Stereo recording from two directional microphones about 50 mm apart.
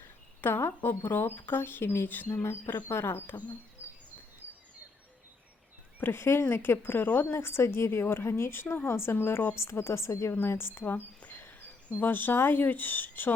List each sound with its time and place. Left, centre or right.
0.4 s speech: left
6.0 s speech: left
8.6 s speech: left
9.6 s a woman's voice: left
10.3 s speech: left
11.2 s a sound: left
11.9 s speech: left